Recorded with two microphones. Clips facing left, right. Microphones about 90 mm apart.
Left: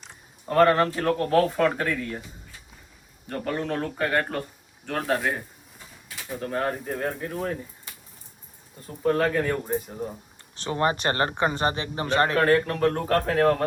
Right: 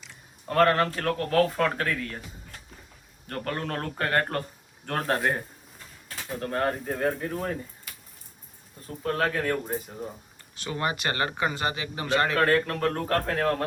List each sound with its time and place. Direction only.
0.4 s speech: 5° left (ahead or behind)
3.2 s speech: 5° left (ahead or behind)
8.9 s speech: centre (ahead or behind)
10.5 s speech: 35° left (ahead or behind)
12.4 s speech: centre (ahead or behind)